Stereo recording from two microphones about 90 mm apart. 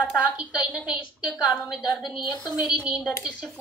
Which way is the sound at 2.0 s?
55° left (ahead or behind).